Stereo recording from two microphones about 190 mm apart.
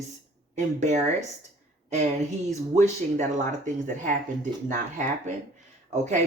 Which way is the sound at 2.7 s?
40° right (ahead or behind).